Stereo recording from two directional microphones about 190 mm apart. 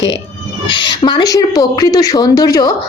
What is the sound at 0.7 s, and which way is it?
Speech, 25° left (ahead or behind).